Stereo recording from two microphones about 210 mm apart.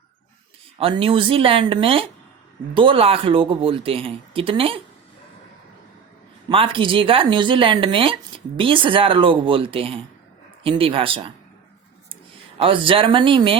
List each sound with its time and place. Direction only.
0.8 s speech: 25° right (ahead or behind)
6.5 s speech: 25° right (ahead or behind)
12.5 s speech: 25° right (ahead or behind)